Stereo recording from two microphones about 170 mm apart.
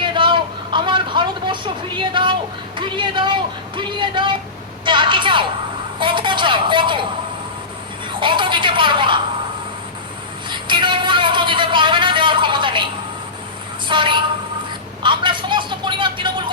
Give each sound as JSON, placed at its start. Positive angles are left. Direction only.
{"t": 0.0, "sound": "vehicle", "side_deg": -30}
{"t": 2.7, "sound": "a woman's voice", "side_deg": -30}
{"t": 8.2, "sound": "a woman's voice", "side_deg": -30}
{"t": 10.5, "sound": "music", "side_deg": -30}
{"t": 13.8, "sound": "a woman's voice", "side_deg": -30}
{"t": 15.0, "sound": "a sound", "side_deg": -30}